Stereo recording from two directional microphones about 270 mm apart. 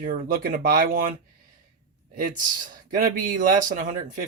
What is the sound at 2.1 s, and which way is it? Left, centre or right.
Speech, right.